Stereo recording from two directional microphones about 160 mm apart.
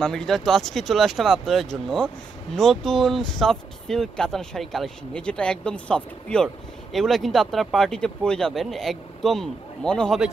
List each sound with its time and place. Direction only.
0.0 s speech: 5° left (ahead or behind)